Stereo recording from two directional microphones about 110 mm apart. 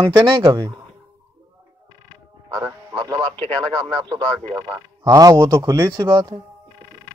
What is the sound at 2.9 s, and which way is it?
Radio, 35° right (ahead or behind).